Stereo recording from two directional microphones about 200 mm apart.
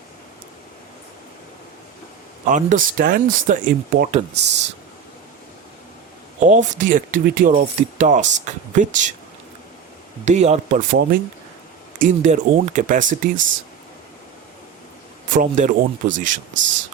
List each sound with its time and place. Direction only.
2.5 s speech: 40° right (ahead or behind)
6.5 s speech: 40° right (ahead or behind)
10.2 s speech: 35° right (ahead or behind)
15.3 s speech: 40° right (ahead or behind)